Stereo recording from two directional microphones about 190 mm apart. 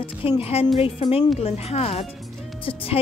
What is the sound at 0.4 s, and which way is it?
Speech, 30° left (ahead or behind).